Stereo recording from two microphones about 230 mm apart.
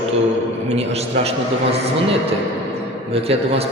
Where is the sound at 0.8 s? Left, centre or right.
Right.